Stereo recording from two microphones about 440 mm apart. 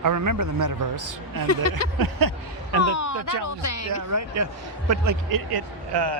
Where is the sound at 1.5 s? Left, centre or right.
Left.